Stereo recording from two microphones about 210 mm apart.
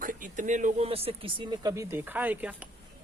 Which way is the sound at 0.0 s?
40° right (ahead or behind).